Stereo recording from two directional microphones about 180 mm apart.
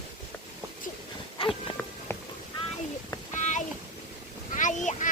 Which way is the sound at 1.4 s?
30° left (ahead or behind).